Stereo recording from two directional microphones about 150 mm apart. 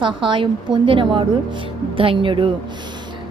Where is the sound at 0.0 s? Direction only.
35° right (ahead or behind).